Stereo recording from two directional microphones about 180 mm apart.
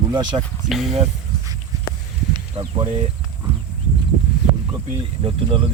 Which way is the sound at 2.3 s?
30° right (ahead or behind).